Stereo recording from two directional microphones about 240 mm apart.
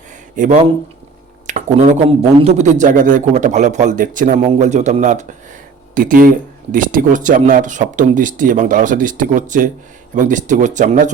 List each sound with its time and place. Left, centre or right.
0.3 s a man's voice: right